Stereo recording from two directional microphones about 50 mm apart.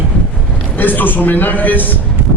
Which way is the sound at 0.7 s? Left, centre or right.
Left.